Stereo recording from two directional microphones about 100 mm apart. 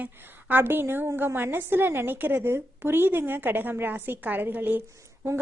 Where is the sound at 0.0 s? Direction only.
20° right (ahead or behind).